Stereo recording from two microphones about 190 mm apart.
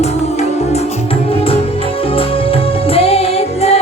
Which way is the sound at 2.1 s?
30° left (ahead or behind).